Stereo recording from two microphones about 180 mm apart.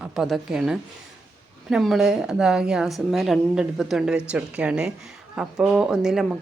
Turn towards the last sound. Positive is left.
turn(degrees=0)  # may be behind; listen again after turning